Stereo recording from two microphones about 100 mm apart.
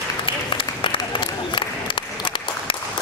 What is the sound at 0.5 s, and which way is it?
Applause, 55° left (ahead or behind).